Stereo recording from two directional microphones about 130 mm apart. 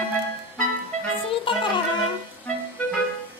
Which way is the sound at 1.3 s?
40° left (ahead or behind).